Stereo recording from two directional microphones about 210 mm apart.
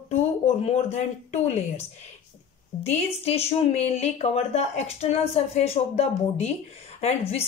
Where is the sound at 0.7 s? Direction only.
30° left (ahead or behind).